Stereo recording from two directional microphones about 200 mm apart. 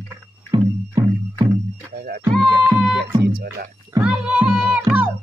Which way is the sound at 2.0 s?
50° right (ahead or behind).